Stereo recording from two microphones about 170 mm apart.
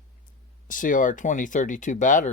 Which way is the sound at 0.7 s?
50° left (ahead or behind).